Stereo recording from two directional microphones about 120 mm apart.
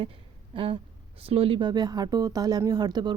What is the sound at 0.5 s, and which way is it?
Speech, 45° right (ahead or behind).